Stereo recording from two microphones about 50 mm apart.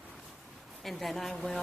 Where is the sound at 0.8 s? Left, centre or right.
Centre.